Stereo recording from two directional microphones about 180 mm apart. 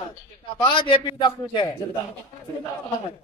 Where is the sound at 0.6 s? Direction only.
25° left (ahead or behind).